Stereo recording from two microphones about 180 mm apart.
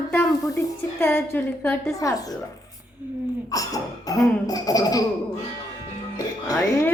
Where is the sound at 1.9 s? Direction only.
20° left (ahead or behind).